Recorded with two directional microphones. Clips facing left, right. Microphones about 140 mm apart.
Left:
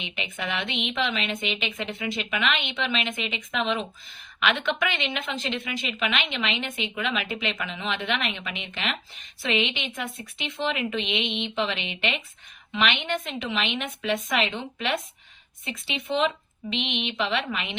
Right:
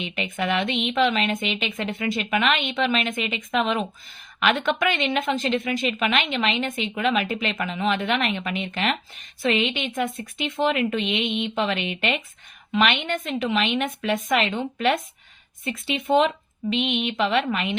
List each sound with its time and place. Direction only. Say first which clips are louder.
0.0 s a woman's voice: right 6 dB; 50° right (ahead or behind)